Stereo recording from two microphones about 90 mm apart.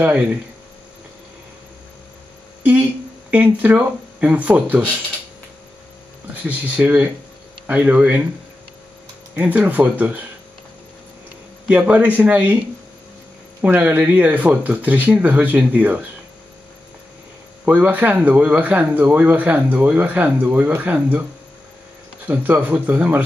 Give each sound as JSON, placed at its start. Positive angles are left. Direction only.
{"t": 0.0, "sound": "speech", "side_deg": -20}
{"t": 2.6, "sound": "speech", "side_deg": -20}
{"t": 6.4, "sound": "speech", "side_deg": -15}
{"t": 9.3, "sound": "speech", "side_deg": -20}
{"t": 11.6, "sound": "speech", "side_deg": -15}
{"t": 13.6, "sound": "speech", "side_deg": -20}
{"t": 17.6, "sound": "speech", "side_deg": -20}
{"t": 22.3, "sound": "speech", "side_deg": -20}